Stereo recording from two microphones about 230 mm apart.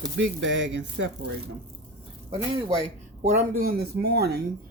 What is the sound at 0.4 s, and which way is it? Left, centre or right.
Speech, right.